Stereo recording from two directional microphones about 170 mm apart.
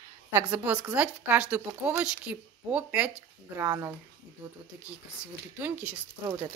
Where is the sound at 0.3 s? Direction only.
10° right (ahead or behind).